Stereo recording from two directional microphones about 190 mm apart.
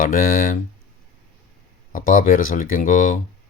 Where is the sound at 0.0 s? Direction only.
45° left (ahead or behind).